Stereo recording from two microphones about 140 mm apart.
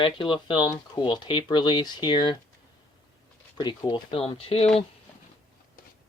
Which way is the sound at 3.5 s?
30° left (ahead or behind).